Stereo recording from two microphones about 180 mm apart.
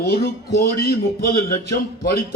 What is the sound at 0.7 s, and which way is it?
A man's voice, 55° left (ahead or behind).